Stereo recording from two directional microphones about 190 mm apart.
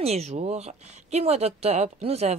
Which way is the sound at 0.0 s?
35° right (ahead or behind).